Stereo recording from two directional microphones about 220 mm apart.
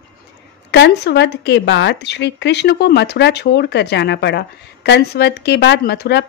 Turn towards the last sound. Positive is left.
turn(degrees=50)  # may be behind; listen again after turning